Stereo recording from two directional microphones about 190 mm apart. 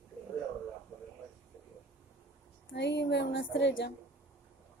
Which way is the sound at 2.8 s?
65° left (ahead or behind).